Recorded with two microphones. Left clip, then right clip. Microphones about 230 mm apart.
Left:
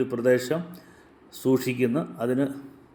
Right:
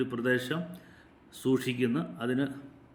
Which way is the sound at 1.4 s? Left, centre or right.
Centre.